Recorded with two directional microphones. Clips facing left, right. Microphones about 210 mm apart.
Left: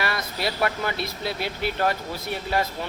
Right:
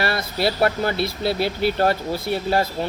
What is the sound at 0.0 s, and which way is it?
A man's voice, 30° right (ahead or behind).